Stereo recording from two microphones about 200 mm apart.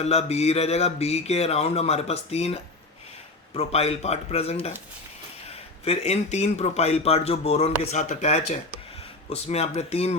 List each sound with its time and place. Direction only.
0.0 s speech: 30° left (ahead or behind)